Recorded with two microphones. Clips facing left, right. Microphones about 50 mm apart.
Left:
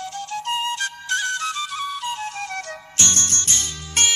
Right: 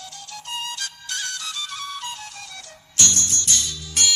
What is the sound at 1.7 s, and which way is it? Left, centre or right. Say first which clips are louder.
Flute: left 5 dB; centre.